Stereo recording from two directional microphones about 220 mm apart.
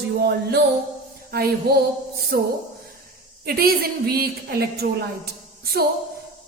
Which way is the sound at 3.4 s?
45° right (ahead or behind).